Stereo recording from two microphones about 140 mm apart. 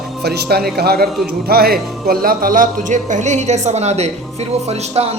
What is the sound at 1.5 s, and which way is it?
A man's voice, 90° right.